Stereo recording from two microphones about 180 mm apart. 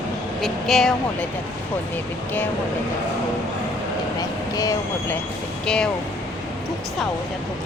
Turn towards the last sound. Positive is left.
turn(degrees=5)  # may be behind; listen again after turning